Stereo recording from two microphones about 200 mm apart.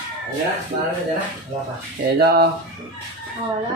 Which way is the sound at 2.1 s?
55° right (ahead or behind).